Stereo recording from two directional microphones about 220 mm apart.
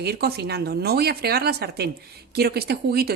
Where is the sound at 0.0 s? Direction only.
45° right (ahead or behind).